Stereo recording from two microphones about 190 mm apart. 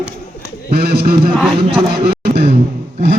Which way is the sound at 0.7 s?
55° right (ahead or behind).